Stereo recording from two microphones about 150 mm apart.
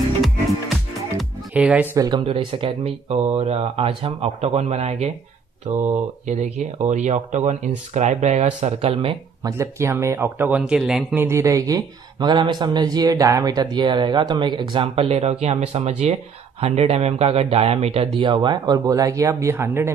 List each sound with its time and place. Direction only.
1.1 s music: 5° right (ahead or behind)
2.0 s a man's voice: 30° right (ahead or behind)
9.4 s speech: 20° right (ahead or behind); by 11.1 s 5° right (ahead or behind)
11.1 s a man's voice: 15° right (ahead or behind)